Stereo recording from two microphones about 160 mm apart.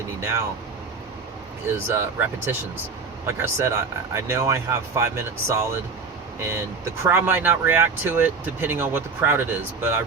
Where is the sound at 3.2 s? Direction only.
15° right (ahead or behind).